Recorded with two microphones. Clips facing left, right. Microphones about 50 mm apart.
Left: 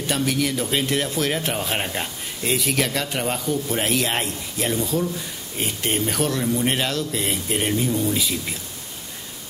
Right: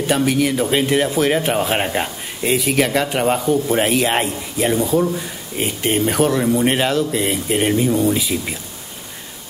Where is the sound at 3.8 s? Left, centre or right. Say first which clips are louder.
Right 6 dB; centre.